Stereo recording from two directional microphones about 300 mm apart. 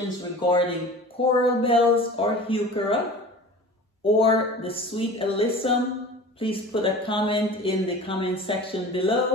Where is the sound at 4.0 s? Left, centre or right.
Centre.